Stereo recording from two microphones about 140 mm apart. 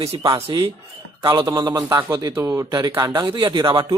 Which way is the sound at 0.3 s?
25° right (ahead or behind).